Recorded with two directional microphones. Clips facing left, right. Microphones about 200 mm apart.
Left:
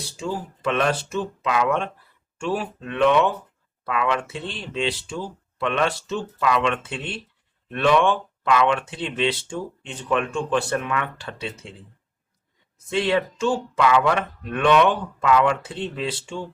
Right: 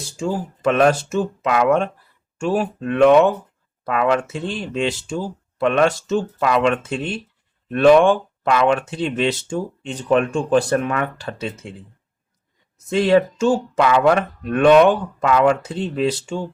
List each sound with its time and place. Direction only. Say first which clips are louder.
0.2 s speech: right 5 dB; 45° right (ahead or behind)
12.9 s speech: right 7 dB; 40° right (ahead or behind)